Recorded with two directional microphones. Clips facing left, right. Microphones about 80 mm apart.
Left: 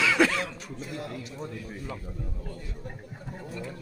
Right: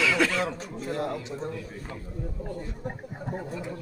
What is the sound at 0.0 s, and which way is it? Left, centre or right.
Chuckle, centre.